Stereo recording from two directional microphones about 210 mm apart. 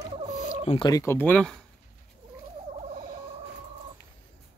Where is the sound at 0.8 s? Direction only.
15° left (ahead or behind).